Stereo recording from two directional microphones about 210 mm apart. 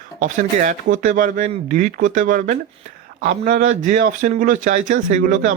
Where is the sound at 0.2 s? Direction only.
40° right (ahead or behind).